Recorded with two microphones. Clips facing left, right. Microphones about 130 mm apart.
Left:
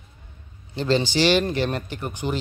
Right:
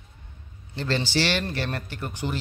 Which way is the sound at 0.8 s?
15° left (ahead or behind).